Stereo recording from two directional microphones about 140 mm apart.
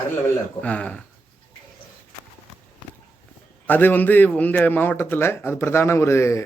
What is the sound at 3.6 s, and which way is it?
A man's voice, 15° left (ahead or behind).